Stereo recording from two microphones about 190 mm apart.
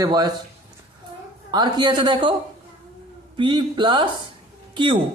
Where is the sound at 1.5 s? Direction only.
20° right (ahead or behind).